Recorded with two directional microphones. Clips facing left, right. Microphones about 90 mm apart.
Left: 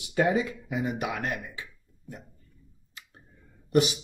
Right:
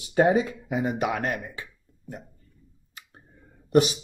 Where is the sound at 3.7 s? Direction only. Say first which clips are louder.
Right 3 dB; 35° right (ahead or behind).